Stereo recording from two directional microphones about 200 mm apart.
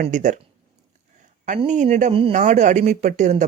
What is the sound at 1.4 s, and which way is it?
Speech, 40° right (ahead or behind).